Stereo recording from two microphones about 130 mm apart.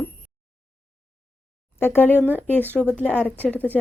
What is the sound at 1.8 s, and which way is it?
Speech, 15° left (ahead or behind).